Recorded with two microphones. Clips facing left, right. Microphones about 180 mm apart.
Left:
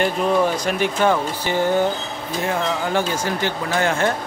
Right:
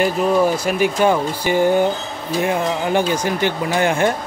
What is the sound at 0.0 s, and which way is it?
Speech, 5° right (ahead or behind).